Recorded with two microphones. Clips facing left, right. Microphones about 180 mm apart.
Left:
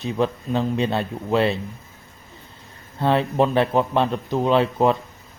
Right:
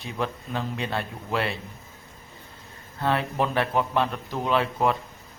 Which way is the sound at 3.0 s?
25° left (ahead or behind).